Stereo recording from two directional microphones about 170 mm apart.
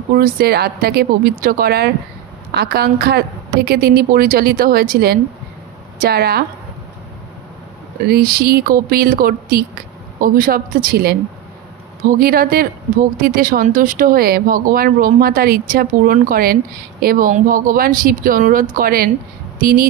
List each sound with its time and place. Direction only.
0.1 s speech: 60° right (ahead or behind)
8.1 s speech: 60° right (ahead or behind)